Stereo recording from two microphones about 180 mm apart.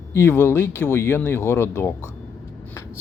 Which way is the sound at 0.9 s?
15° left (ahead or behind).